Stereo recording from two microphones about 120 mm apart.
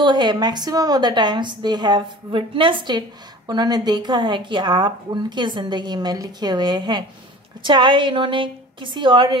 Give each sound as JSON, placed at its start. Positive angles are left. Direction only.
{"t": 0.0, "sound": "a woman's voice", "side_deg": -40}